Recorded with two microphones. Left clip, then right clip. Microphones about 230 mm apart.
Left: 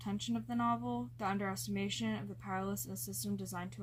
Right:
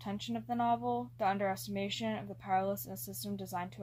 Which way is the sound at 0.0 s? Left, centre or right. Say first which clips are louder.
Right 1 dB; left.